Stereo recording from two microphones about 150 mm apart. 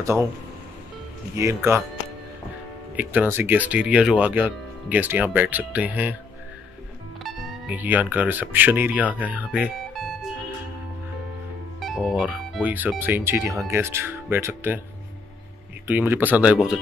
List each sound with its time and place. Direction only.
0.0 s speech: 20° right (ahead or behind)
1.3 s speech: 20° right (ahead or behind)
3.0 s speech: 10° right (ahead or behind)
7.2 s speech: 10° right (ahead or behind)
11.8 s speech: centre (ahead or behind)
15.9 s speech: 15° right (ahead or behind)